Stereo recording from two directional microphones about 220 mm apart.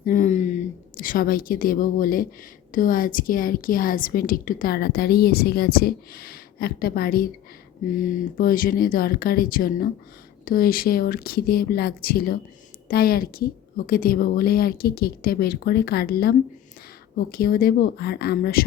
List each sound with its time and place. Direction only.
0.0 s a woman's voice: 35° left (ahead or behind)